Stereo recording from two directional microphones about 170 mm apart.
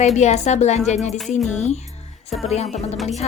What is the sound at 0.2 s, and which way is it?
A woman's voice, 40° left (ahead or behind).